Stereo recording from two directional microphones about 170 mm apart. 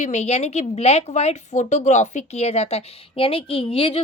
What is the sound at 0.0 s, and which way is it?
A woman's voice, 40° left (ahead or behind).